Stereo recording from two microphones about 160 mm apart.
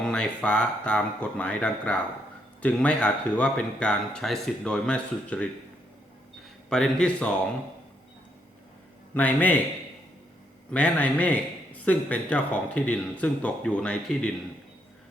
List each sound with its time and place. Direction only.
0.0 s speech: 5° left (ahead or behind)
6.7 s speech: 5° left (ahead or behind)
9.1 s a man's voice: 10° left (ahead or behind)
10.7 s a man's voice: 10° left (ahead or behind)